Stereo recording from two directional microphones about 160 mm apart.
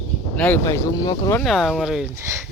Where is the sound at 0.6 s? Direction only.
20° left (ahead or behind).